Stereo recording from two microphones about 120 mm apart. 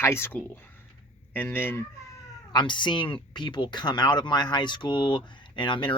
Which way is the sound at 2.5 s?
40° left (ahead or behind).